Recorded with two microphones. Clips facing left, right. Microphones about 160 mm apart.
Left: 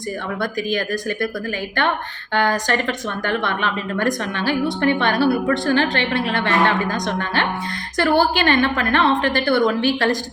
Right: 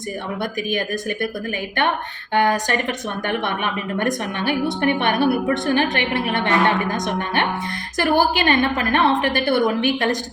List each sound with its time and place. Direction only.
2.3 s a woman's voice: 20° right (ahead or behind)